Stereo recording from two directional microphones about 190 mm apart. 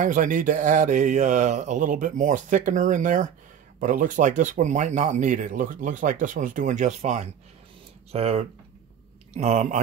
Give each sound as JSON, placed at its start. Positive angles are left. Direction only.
{"t": 0.0, "sound": "speech", "side_deg": -45}